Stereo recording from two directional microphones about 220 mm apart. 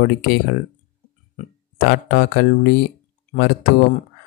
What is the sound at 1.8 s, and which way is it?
Speech, 45° left (ahead or behind).